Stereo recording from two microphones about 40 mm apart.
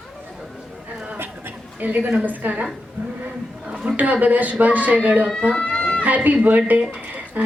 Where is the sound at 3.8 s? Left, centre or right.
Right.